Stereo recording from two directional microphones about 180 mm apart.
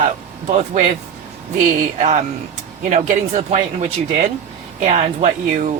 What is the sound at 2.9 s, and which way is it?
A woman's voice, 45° right (ahead or behind).